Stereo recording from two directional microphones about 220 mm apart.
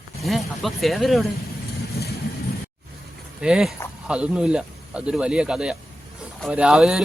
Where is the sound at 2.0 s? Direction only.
45° left (ahead or behind).